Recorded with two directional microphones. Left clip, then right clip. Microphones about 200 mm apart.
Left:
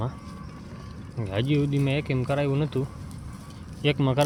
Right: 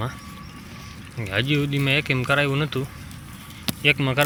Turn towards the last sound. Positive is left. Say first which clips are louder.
# right 5 dB
turn(degrees=15)  # may be behind; listen again after turning